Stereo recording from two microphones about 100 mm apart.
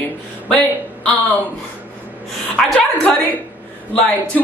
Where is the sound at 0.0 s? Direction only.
15° left (ahead or behind).